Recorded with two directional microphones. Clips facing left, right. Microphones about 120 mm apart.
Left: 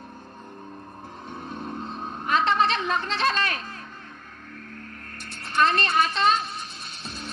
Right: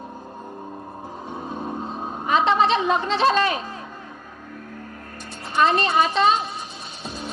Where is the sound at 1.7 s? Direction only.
15° right (ahead or behind).